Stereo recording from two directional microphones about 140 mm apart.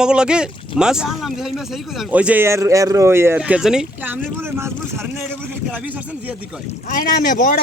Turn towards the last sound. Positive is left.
turn(degrees=75)  # may be behind; listen again after turning